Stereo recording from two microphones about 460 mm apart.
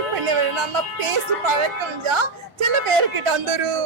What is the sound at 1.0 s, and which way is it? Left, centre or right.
A woman's voice, right.